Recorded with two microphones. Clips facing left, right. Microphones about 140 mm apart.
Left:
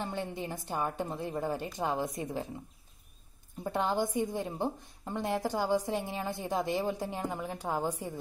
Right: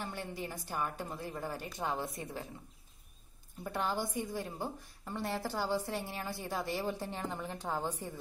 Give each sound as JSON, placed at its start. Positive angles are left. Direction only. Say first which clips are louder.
{"t": 0.0, "sound": "a woman's voice", "louder": "left 5 dB", "side_deg": 20}
{"t": 3.6, "sound": "a woman's voice", "louder": "left 5 dB", "side_deg": 20}